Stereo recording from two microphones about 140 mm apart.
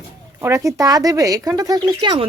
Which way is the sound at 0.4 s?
20° right (ahead or behind).